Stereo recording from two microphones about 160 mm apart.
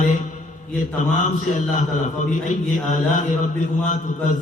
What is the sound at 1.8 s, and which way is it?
A man's voice, 50° left (ahead or behind).